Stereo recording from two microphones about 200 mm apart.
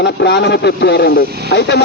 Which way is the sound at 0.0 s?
55° left (ahead or behind).